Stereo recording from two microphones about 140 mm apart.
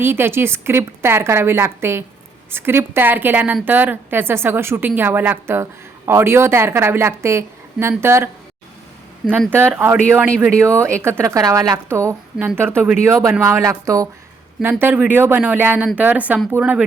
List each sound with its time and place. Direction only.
0.0 s a woman's voice: 15° right (ahead or behind)
9.5 s a woman's voice: 15° right (ahead or behind)